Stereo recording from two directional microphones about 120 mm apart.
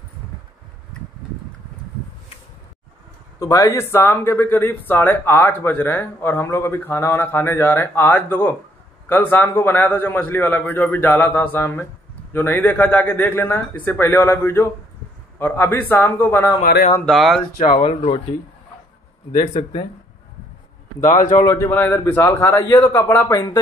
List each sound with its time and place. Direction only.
3.3 s a man's voice: 25° left (ahead or behind)
17.0 s speech: centre (ahead or behind)
17.6 s speech: 60° left (ahead or behind)
21.1 s a man's voice: 90° left
21.4 s speech: 25° left (ahead or behind)
21.6 s a man's voice: 15° left (ahead or behind)
23.3 s speech: 30° left (ahead or behind)